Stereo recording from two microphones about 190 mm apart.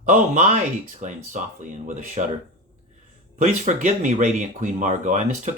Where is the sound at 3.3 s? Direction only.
40° right (ahead or behind).